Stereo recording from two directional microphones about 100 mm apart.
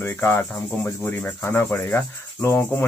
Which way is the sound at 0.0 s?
20° left (ahead or behind).